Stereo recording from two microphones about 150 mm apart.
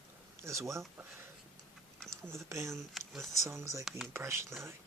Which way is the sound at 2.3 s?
20° right (ahead or behind).